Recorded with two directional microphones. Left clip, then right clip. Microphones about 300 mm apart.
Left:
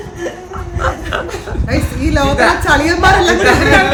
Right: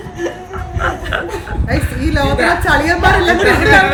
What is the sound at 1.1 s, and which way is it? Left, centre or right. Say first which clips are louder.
Speech: even; centre.